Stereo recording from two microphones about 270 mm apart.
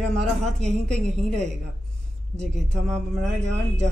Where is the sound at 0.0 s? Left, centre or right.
Centre.